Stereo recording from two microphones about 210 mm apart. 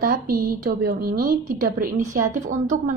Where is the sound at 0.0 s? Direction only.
45° right (ahead or behind).